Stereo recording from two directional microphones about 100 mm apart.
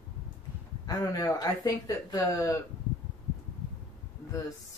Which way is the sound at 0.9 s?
40° left (ahead or behind).